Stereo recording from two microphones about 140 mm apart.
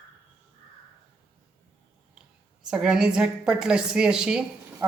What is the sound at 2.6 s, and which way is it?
A woman's voice, 5° right (ahead or behind).